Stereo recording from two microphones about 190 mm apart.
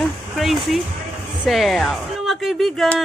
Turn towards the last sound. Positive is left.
turn(degrees=0)  # may be behind; listen again after turning